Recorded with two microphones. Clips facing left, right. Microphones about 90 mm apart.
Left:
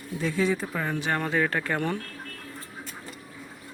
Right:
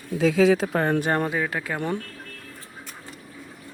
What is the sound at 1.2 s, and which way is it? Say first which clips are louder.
Speech: left 1 dB; 10° right (ahead or behind).